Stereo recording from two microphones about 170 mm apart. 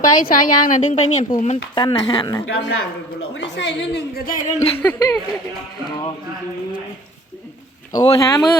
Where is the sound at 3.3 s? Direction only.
90° left; by 4.6 s 50° left (ahead or behind).